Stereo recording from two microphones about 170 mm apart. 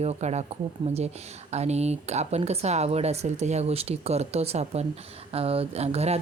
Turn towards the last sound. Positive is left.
turn(degrees=-40)  # may be behind; listen again after turning